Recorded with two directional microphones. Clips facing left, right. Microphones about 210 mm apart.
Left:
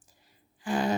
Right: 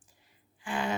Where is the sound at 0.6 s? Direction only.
40° left (ahead or behind).